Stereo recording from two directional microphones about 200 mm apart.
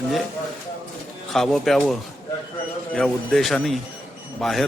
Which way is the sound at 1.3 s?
Centre (ahead or behind).